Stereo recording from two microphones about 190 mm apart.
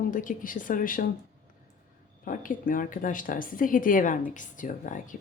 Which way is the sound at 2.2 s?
45° left (ahead or behind).